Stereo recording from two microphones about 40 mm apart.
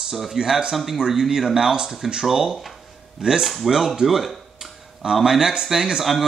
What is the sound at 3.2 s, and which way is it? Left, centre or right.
Speech, centre.